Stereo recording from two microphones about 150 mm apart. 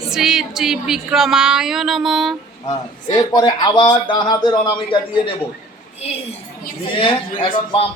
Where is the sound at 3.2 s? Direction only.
25° left (ahead or behind).